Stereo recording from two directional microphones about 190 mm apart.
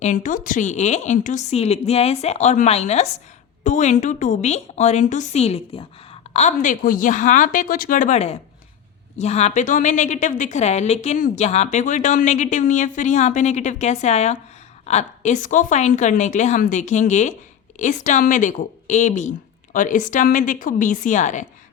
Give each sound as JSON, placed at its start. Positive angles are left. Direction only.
{"t": 0.0, "sound": "a woman's voice", "side_deg": 40}